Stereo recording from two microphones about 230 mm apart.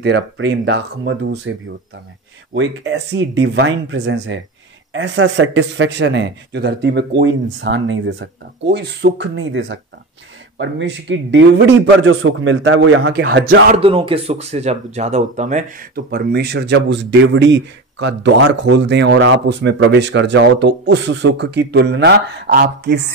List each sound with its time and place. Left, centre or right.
0.0 s a man's voice: right
2.5 s a man's voice: right
13.7 s a man's voice: right